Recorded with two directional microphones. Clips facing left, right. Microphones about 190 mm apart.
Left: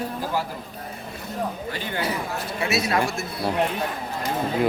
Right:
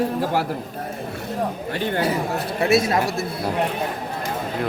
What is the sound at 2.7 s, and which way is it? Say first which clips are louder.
Speech: right 4 dB; 45° right (ahead or behind).